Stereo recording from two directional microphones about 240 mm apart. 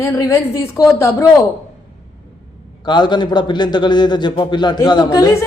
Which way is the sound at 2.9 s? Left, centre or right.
Centre.